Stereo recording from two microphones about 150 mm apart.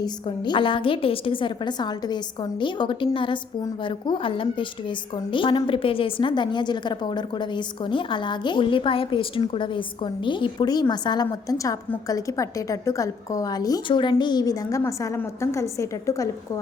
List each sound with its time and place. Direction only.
0.0 s a woman's voice: 30° left (ahead or behind)